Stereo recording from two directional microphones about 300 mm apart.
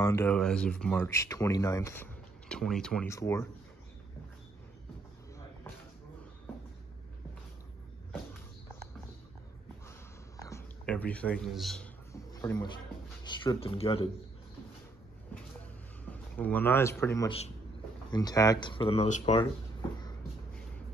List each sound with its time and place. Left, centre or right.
0.0 s speech: centre
9.8 s a sound: centre
16.1 s speech: centre; by 19.4 s left